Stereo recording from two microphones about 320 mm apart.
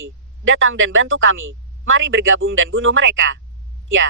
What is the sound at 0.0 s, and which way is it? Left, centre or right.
Speech, right.